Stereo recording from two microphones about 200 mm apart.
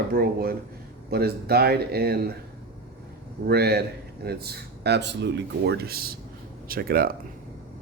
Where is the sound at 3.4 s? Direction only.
50° right (ahead or behind).